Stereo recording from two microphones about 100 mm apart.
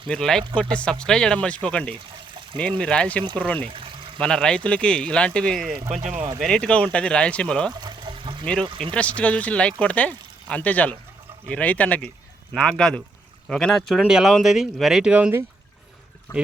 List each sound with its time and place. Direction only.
0.1 s speech: 5° left (ahead or behind)
3.7 s a sound: 60° right (ahead or behind)
4.2 s speech: 5° left (ahead or behind)
7.7 s pour: 45° right (ahead or behind)
8.6 s speech: 60° right (ahead or behind)
8.9 s speech: 10° left (ahead or behind); by 15.3 s 10° right (ahead or behind)
16.3 s speech: 30° left (ahead or behind)